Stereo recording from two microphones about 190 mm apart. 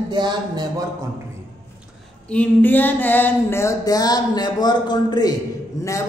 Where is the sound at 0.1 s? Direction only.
20° right (ahead or behind).